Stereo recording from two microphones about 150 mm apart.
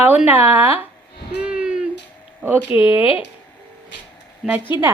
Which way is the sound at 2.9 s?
35° left (ahead or behind).